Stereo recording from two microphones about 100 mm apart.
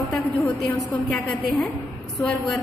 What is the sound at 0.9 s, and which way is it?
Speech, 15° left (ahead or behind).